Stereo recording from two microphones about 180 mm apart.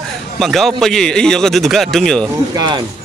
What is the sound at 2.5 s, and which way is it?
Speech, 25° right (ahead or behind).